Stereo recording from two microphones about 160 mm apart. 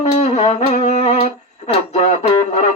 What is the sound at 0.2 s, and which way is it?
Music, 45° left (ahead or behind).